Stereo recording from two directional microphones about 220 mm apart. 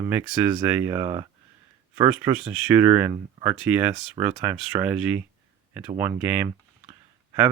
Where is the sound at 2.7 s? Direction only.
10° right (ahead or behind).